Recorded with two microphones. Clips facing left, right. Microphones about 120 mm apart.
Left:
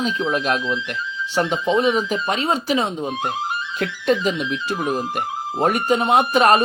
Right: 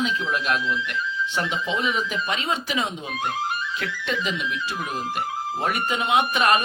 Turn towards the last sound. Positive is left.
turn(degrees=40)  # may be behind; listen again after turning